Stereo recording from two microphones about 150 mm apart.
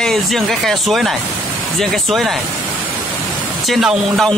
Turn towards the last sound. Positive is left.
turn(degrees=0)  # may be behind; listen again after turning